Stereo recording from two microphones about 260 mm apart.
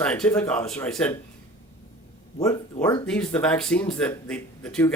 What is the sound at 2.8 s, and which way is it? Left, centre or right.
Speech, centre.